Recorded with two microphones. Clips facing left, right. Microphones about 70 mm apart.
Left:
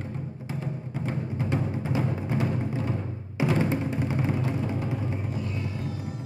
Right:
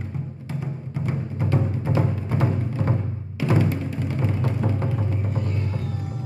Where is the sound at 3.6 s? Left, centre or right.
Left.